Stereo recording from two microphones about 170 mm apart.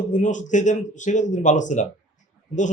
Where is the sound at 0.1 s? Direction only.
45° left (ahead or behind).